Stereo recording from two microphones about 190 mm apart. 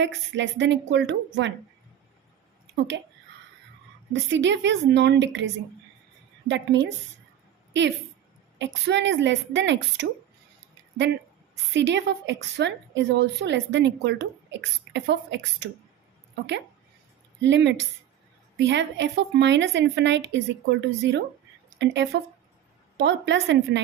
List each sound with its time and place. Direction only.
0.0 s a woman's voice: 70° right (ahead or behind)
2.7 s speech: 65° right (ahead or behind)
4.1 s a woman's voice: 70° right (ahead or behind)
6.5 s a woman's voice: 70° right (ahead or behind)
8.5 s a woman's voice: 70° right (ahead or behind)
17.4 s a woman's voice: 70° right (ahead or behind)